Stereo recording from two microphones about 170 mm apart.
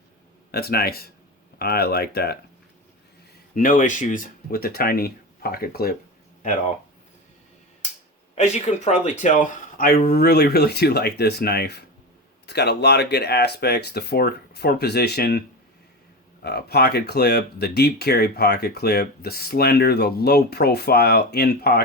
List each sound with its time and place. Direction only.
0.5 s speech: 65° left (ahead or behind)
3.5 s speech: 55° left (ahead or behind)
8.4 s speech: 40° left (ahead or behind); by 10.0 s 60° left (ahead or behind)
10.1 s speech: 70° left (ahead or behind)